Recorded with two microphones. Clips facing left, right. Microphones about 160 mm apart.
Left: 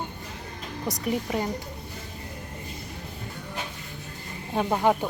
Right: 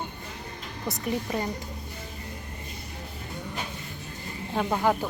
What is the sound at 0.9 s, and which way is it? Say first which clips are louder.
Speech: left 2 dB; 10° left (ahead or behind).